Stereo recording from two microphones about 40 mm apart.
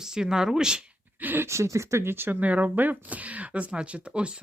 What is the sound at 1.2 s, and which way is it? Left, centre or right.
Speech, right.